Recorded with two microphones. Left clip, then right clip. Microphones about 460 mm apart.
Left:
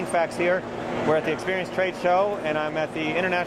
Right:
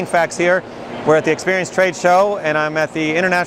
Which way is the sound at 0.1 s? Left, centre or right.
Right.